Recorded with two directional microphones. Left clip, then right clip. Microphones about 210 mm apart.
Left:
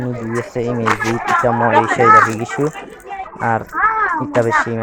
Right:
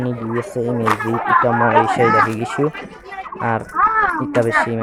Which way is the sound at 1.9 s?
5° right (ahead or behind).